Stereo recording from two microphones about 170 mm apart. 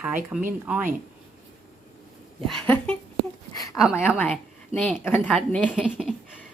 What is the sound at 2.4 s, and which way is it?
Speech, 5° left (ahead or behind).